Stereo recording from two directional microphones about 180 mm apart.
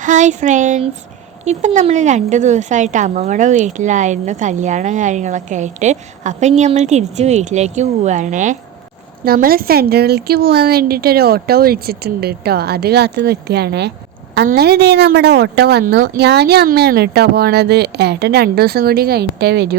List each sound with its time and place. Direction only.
0.0 s a woman's voice: 45° right (ahead or behind)
9.2 s a woman's voice: 55° right (ahead or behind)